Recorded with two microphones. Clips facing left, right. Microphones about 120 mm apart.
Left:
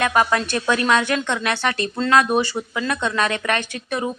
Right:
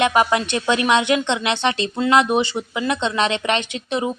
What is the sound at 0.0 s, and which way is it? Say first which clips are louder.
A woman's voice: right 2 dB; 15° right (ahead or behind).